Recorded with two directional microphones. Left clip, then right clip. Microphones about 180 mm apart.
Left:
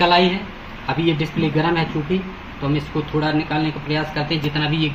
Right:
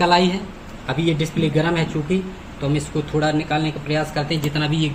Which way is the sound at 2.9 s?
20° right (ahead or behind).